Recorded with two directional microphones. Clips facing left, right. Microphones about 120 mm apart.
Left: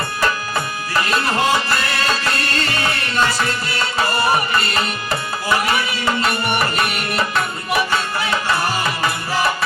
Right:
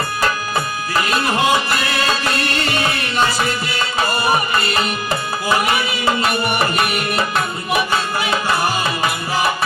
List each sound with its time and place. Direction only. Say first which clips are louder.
1.0 s music: right 1 dB; 20° right (ahead or behind)
5.5 s music: right 1 dB; 20° right (ahead or behind)
8.2 s music: right 1 dB; 20° right (ahead or behind)